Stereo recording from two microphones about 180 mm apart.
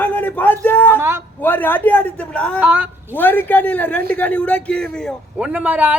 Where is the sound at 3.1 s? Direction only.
10° left (ahead or behind).